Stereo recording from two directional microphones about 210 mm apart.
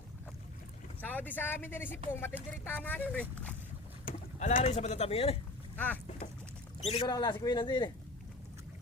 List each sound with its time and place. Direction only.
1.0 s speech: 10° left (ahead or behind)
4.0 s speech: 35° left (ahead or behind)
5.7 s speech: 10° left (ahead or behind)
6.8 s speech: 30° left (ahead or behind)